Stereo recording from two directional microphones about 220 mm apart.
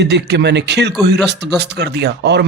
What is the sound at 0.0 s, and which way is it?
Speech, 50° right (ahead or behind).